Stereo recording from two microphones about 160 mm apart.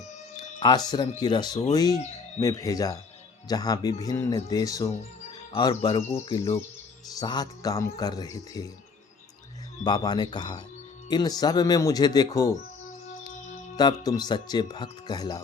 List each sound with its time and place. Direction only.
0.6 s speech: 25° left (ahead or behind)
9.8 s speech: 25° left (ahead or behind)
13.7 s speech: 25° left (ahead or behind)